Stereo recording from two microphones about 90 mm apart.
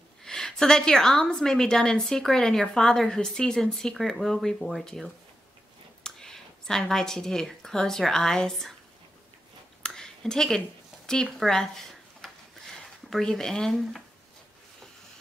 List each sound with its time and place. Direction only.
0.2 s a woman's voice: 5° left (ahead or behind)
9.8 s a sound: 5° left (ahead or behind)
12.7 s speech: 5° left (ahead or behind)